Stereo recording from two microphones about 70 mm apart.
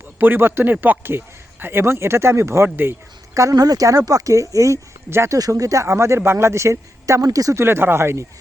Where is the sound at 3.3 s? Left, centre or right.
Right.